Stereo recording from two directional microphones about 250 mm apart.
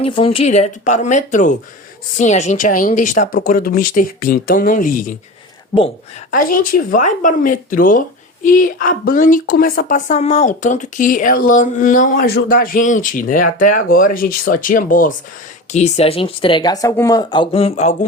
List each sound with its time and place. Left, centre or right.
0.0 s speech: left
6.3 s speech: left